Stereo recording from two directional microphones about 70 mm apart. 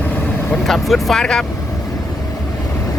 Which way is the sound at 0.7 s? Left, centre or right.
Centre.